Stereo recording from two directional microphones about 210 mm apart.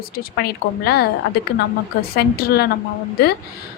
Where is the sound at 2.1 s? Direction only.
50° left (ahead or behind).